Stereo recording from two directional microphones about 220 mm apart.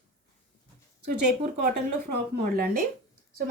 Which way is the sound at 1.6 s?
45° right (ahead or behind).